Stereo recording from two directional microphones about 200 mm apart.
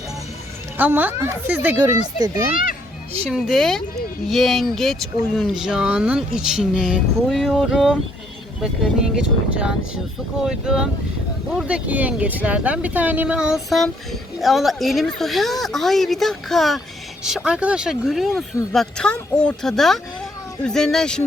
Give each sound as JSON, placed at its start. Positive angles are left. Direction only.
{"t": 0.8, "sound": "speech", "side_deg": -10}
{"t": 3.2, "sound": "speech", "side_deg": 0}
{"t": 9.1, "sound": "speech", "side_deg": -5}